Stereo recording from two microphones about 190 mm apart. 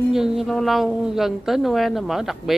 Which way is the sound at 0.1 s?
Centre (ahead or behind).